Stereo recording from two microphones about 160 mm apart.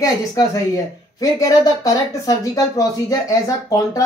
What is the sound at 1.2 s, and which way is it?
Speech, 20° left (ahead or behind).